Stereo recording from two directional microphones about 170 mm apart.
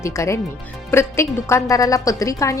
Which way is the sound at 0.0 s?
15° left (ahead or behind).